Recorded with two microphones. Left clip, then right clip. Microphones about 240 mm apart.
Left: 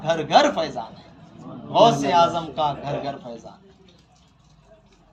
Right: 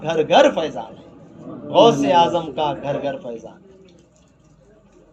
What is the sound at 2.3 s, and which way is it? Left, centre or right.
Speech, left.